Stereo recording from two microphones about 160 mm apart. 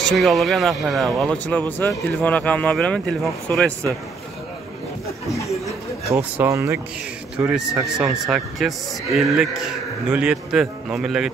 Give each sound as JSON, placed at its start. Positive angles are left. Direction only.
{"t": 0.0, "sound": "speech", "side_deg": 0}
{"t": 6.1, "sound": "speech", "side_deg": -15}
{"t": 7.3, "sound": "a man's voice", "side_deg": -5}